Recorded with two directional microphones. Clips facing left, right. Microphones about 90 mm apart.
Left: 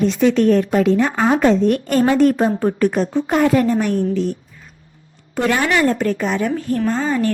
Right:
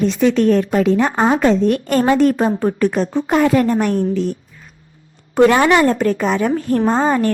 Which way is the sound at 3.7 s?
75° right (ahead or behind).